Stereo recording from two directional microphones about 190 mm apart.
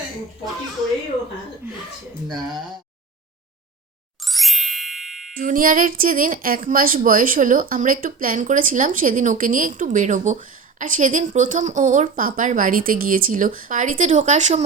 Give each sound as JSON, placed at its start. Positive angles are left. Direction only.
{"t": 2.2, "sound": "speech", "side_deg": 0}
{"t": 4.2, "sound": "ding", "side_deg": 0}
{"t": 5.3, "sound": "a woman's voice", "side_deg": -45}